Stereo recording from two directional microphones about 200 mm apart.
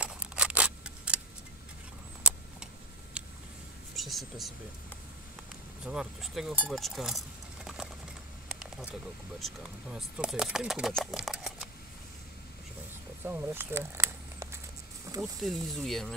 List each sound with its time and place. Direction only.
0.0 s camera: 5° right (ahead or behind)
2.3 s vehicle: 5° right (ahead or behind)
3.2 s a sound: 5° right (ahead or behind)
3.9 s speech: centre (ahead or behind)
5.9 s speech: 5° right (ahead or behind)
7.6 s a sound: centre (ahead or behind)
9.4 s speech: centre (ahead or behind)
13.2 s a sound: 10° right (ahead or behind)
15.0 s speech: 15° right (ahead or behind)
15.4 s speech: centre (ahead or behind)